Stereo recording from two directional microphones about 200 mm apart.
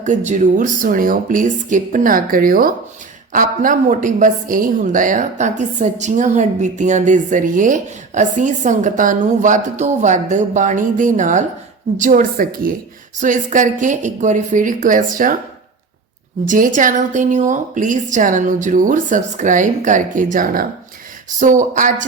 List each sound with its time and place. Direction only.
0.3 s a woman's voice: 40° right (ahead or behind)
16.5 s a woman's voice: 40° right (ahead or behind)